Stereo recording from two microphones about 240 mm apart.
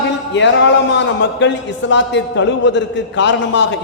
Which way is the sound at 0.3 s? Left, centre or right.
Left.